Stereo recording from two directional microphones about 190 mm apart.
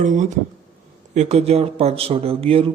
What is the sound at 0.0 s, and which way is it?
Speech, 40° right (ahead or behind).